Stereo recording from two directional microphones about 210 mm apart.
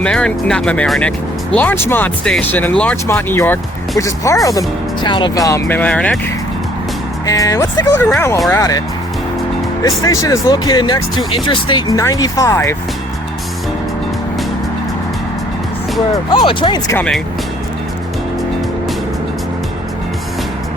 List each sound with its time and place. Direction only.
0.0 s speech: 5° left (ahead or behind)
7.3 s speech: 15° left (ahead or behind)
9.8 s speech: 15° left (ahead or behind)
16.3 s speech: 20° left (ahead or behind)